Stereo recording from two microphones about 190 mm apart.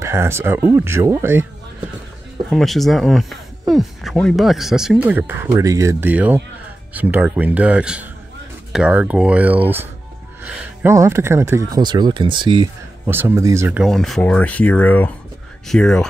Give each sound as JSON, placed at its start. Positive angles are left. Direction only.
{"t": 0.0, "sound": "speech", "side_deg": -15}
{"t": 2.5, "sound": "speech", "side_deg": 0}
{"t": 13.0, "sound": "speech", "side_deg": -10}